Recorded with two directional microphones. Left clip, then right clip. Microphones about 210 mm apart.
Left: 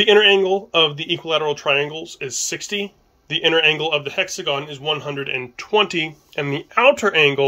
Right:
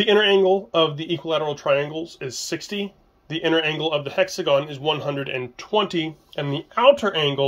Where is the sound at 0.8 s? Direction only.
30° left (ahead or behind).